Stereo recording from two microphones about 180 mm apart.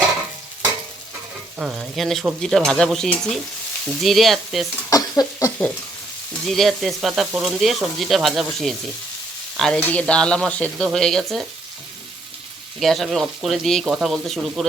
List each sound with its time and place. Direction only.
1.5 s frying: 5° right (ahead or behind)
4.9 s a sound: 20° left (ahead or behind)
6.5 s frying: centre (ahead or behind)
12.8 s frying: centre (ahead or behind)